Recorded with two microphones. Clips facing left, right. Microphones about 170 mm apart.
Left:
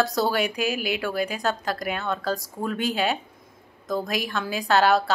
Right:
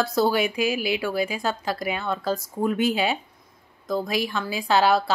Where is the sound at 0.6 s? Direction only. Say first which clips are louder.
Right 2 dB; 45° left (ahead or behind).